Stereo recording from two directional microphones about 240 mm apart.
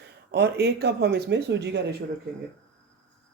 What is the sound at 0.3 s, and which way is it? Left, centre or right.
A woman's voice, right.